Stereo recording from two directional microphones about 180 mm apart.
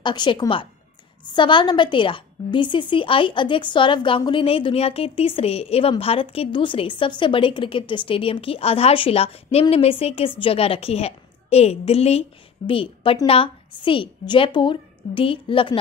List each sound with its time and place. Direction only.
0.0 s a woman's voice: 25° left (ahead or behind)